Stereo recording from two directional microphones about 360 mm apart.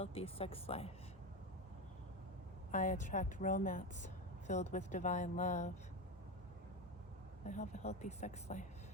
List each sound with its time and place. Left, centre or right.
0.0 s speech: centre
2.7 s a woman's voice: centre
7.4 s a woman's voice: centre